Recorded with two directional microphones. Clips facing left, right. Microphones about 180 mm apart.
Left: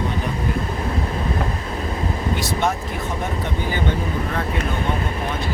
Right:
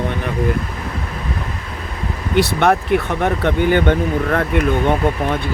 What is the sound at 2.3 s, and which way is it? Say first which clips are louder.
Speech: right 10 dB; 65° right (ahead or behind).